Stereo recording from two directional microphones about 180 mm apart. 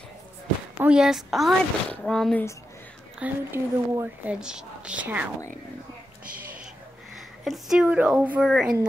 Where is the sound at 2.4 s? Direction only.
15° left (ahead or behind).